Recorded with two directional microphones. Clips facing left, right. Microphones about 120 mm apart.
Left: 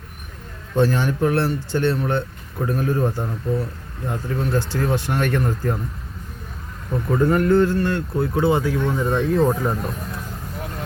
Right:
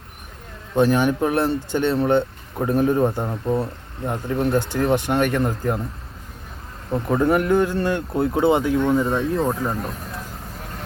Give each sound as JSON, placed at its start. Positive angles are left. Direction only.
{"t": 0.7, "sound": "speech", "side_deg": -15}
{"t": 7.1, "sound": "speech", "side_deg": -15}
{"t": 8.9, "sound": "speech", "side_deg": 0}